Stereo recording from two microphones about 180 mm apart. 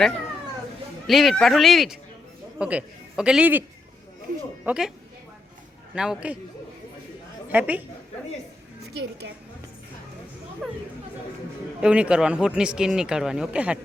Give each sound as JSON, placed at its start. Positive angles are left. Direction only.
{"t": 1.0, "sound": "a man's voice", "side_deg": 0}
{"t": 4.6, "sound": "speech", "side_deg": -5}
{"t": 5.9, "sound": "speech", "side_deg": -5}
{"t": 7.5, "sound": "a man's voice", "side_deg": -10}
{"t": 8.8, "sound": "a woman's voice", "side_deg": -65}
{"t": 10.6, "sound": "speech", "side_deg": 5}
{"t": 11.8, "sound": "speech", "side_deg": -5}